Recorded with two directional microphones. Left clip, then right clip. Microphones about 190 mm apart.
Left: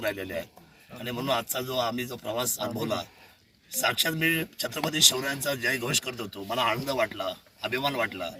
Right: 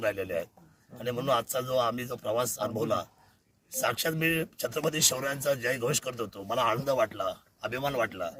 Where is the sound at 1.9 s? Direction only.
40° right (ahead or behind).